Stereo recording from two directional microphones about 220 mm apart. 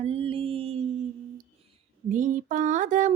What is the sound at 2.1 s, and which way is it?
Female singing, 35° right (ahead or behind).